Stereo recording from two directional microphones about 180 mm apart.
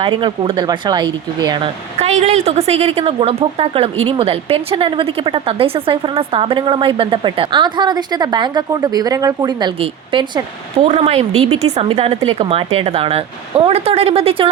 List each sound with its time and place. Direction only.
0.0 s a woman's voice: 25° right (ahead or behind)
2.0 s a woman's voice: 35° right (ahead or behind)